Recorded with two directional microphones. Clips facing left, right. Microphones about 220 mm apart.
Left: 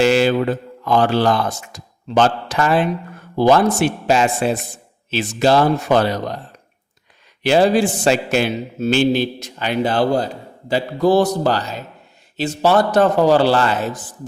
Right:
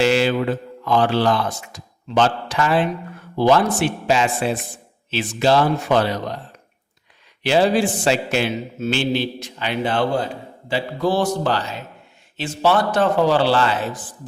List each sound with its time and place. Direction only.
0.0 s a man's voice: 45° left (ahead or behind)